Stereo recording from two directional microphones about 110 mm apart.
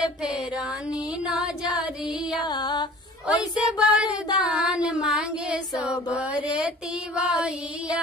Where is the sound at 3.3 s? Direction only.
10° right (ahead or behind).